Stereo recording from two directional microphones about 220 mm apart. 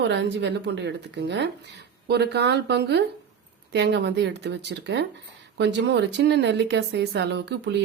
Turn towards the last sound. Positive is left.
turn(degrees=-50)  # may be behind; listen again after turning